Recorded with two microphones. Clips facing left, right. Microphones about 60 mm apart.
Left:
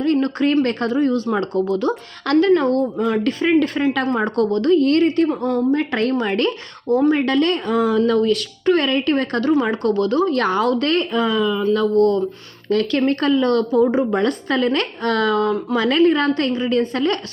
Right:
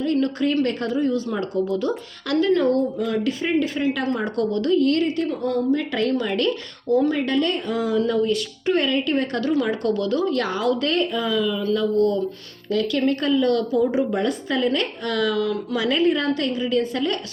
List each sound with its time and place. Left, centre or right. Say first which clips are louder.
0.0 s a sound: left 3 dB; left
0.6 s a woman's voice: left 3 dB; left
4.1 s speech: left 4 dB; left
7.1 s speech: left 4 dB; left